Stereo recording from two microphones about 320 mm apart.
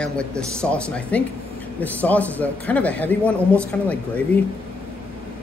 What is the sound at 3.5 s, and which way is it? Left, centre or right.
Speech, centre.